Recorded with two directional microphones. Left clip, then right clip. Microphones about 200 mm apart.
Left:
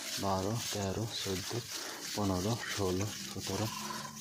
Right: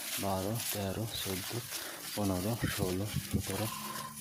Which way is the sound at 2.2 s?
10° right (ahead or behind).